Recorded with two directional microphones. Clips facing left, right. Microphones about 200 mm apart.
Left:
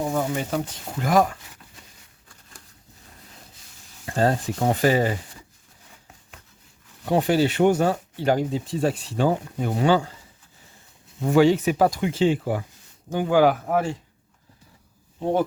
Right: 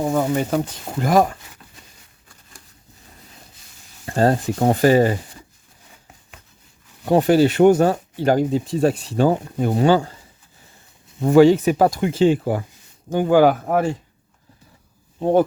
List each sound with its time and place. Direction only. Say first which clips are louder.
0.0 s speech: right 5 dB; 75° right (ahead or behind)
0.3 s speech: right 6 dB; 40° right (ahead or behind)
4.0 s speech: right 4 dB; 40° right (ahead or behind)
7.0 s speech: right 5 dB; 40° right (ahead or behind)
11.3 s speech: right 5 dB; 40° right (ahead or behind)
15.2 s speech: right 6 dB; 50° right (ahead or behind)